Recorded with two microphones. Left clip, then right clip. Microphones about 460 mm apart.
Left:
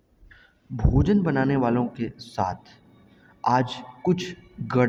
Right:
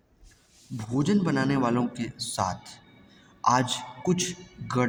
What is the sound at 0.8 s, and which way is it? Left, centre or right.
A man's voice, left.